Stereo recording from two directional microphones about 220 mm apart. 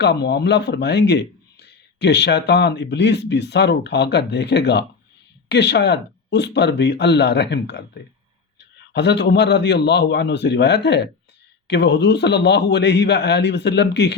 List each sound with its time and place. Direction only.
0.0 s speech: 50° left (ahead or behind)